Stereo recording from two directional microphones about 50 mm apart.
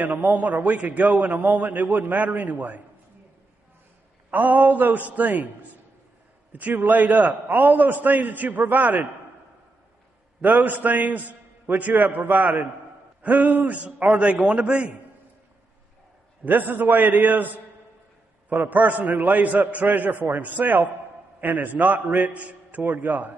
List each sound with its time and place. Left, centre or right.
0.0 s a man's voice: right
4.3 s a man's voice: right
6.5 s a man's voice: right
10.4 s a man's voice: right
16.4 s a man's voice: right